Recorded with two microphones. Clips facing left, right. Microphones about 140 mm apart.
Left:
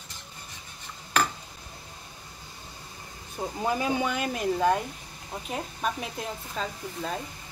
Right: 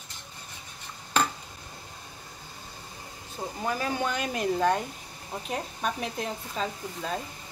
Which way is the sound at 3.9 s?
5° left (ahead or behind).